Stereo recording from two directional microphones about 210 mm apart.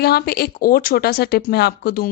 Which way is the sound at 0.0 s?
50° left (ahead or behind).